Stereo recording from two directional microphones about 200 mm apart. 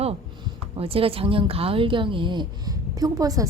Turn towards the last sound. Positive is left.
turn(degrees=-15)  # may be behind; listen again after turning